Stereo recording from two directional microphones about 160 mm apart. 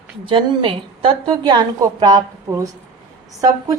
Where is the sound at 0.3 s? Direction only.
35° right (ahead or behind).